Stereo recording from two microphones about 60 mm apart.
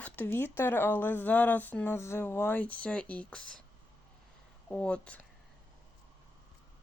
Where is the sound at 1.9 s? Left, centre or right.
Left.